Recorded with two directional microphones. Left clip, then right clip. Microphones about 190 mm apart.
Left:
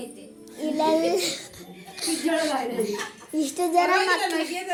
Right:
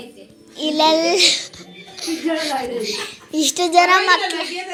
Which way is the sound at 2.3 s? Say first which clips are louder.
Right 3 dB; centre (ahead or behind).